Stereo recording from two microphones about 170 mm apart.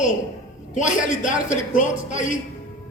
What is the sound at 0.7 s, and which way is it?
A woman's voice, 50° left (ahead or behind).